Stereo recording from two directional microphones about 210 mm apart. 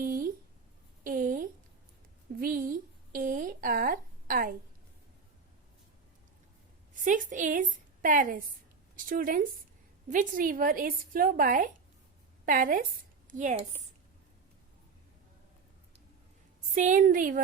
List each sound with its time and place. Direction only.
0.0 s a sound: 40° right (ahead or behind)
6.9 s a woman's voice: 40° right (ahead or behind)
16.7 s a woman's voice: 40° right (ahead or behind)